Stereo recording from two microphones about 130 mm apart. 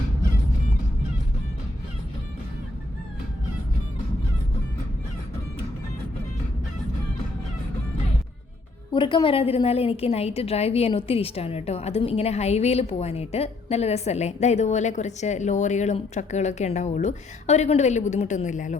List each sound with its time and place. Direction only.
8.9 s a woman's voice: 40° left (ahead or behind); by 18.8 s 70° left (ahead or behind)